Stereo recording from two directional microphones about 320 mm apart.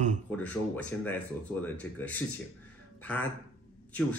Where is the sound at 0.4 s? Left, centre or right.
Centre.